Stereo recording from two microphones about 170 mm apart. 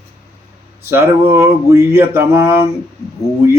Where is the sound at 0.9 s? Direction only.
15° right (ahead or behind).